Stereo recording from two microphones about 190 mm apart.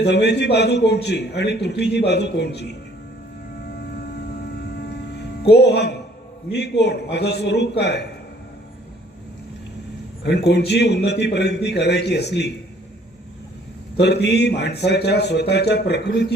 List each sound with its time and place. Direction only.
0.0 s a man's voice: 60° left (ahead or behind)
4.9 s hum: 60° left (ahead or behind)
6.5 s a man's voice: 65° left (ahead or behind)
10.2 s a man's voice: 60° left (ahead or behind)
14.0 s a man's voice: 65° left (ahead or behind)